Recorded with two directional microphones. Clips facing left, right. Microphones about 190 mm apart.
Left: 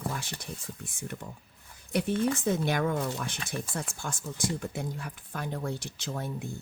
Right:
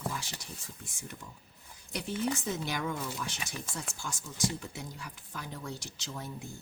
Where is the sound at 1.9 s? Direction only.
55° left (ahead or behind).